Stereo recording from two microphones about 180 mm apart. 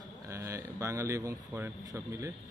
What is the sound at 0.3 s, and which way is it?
Speech, 15° right (ahead or behind).